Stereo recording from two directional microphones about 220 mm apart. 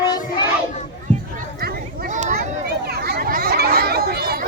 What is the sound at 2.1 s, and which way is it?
Children playing, 40° right (ahead or behind).